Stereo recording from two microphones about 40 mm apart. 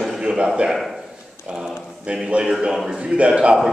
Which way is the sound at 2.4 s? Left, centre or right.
Right.